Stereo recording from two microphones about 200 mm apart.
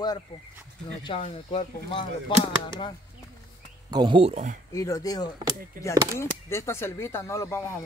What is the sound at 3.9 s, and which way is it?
Speech, 25° right (ahead or behind).